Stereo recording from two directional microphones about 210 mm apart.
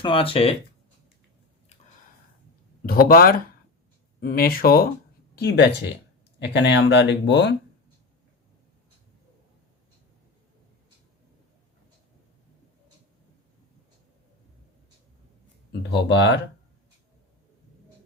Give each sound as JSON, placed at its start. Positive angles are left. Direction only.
{"t": 0.0, "sound": "speech", "side_deg": 25}
{"t": 2.8, "sound": "speech", "side_deg": 45}
{"t": 15.9, "sound": "speech", "side_deg": 60}